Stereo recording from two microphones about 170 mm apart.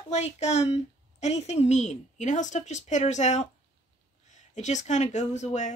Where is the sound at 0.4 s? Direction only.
40° left (ahead or behind).